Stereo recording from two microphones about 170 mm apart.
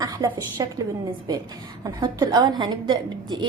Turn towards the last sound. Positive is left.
turn(degrees=-25)  # may be behind; listen again after turning